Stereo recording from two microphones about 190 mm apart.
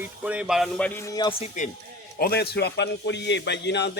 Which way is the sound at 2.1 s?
55° left (ahead or behind).